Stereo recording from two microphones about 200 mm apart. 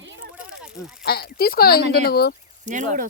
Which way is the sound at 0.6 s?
5° right (ahead or behind).